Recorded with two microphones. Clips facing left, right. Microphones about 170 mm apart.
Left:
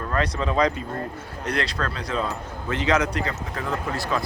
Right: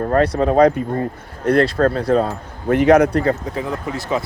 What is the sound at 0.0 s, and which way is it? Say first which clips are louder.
Speech: right 9 dB; 50° right (ahead or behind).